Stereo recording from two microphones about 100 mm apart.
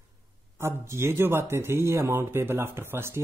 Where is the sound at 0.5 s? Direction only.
25° right (ahead or behind).